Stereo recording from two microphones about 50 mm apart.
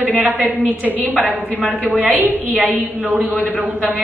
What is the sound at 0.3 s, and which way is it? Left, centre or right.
Speech, right.